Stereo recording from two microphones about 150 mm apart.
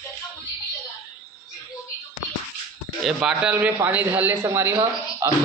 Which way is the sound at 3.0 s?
5° right (ahead or behind).